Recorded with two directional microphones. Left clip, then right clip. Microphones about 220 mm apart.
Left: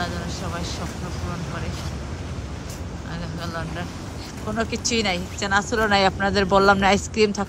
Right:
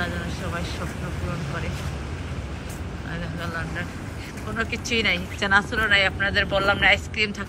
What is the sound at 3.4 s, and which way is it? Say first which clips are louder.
Speech: even; 10° left (ahead or behind).